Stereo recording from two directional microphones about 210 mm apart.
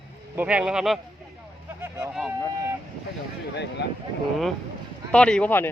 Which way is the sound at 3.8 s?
55° left (ahead or behind).